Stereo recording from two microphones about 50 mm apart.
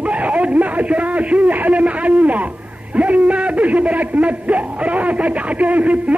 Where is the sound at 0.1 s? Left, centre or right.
Right.